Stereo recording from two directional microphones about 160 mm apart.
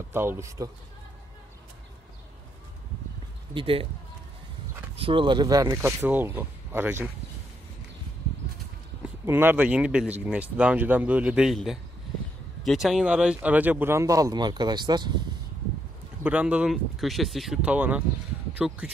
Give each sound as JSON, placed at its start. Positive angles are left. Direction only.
{"t": 0.1, "sound": "speech", "side_deg": -15}
{"t": 3.5, "sound": "speech", "side_deg": -35}
{"t": 4.9, "sound": "speech", "side_deg": -35}
{"t": 9.2, "sound": "speech", "side_deg": -15}
{"t": 16.2, "sound": "speech", "side_deg": -10}